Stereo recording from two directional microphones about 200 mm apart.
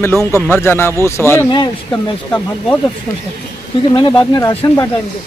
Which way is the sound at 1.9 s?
10° left (ahead or behind).